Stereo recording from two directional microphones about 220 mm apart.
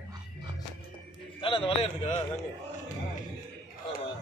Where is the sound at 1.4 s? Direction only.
25° left (ahead or behind).